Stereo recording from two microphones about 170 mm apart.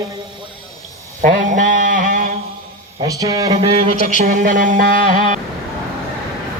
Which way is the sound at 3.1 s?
20° right (ahead or behind).